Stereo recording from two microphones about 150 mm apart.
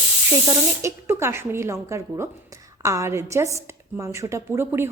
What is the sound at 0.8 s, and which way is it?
A woman's voice, 15° right (ahead or behind).